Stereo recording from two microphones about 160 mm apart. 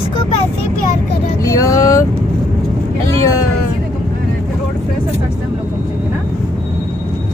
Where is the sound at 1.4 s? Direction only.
20° left (ahead or behind).